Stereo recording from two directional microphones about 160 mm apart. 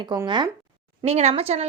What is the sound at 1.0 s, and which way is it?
Speech, 40° right (ahead or behind).